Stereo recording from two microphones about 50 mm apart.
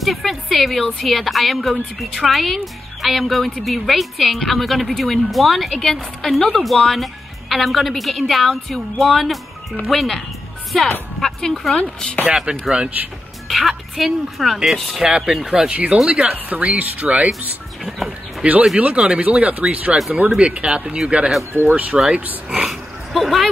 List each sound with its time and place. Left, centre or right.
0.0 s speech: centre
12.4 s speech: centre
13.5 s speech: centre
15.0 s speech: centre
15.7 s speech: right
17.8 s speech: centre
18.4 s speech: right
21.6 s speech: right
22.5 s oink: centre
23.1 s speech: centre